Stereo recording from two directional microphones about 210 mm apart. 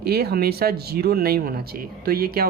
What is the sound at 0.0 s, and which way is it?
Speech, 50° right (ahead or behind).